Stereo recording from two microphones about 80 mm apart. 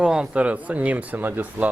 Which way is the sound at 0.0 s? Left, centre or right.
Centre.